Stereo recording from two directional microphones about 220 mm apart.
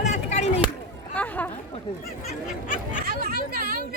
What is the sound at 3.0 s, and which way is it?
Speech, 40° right (ahead or behind).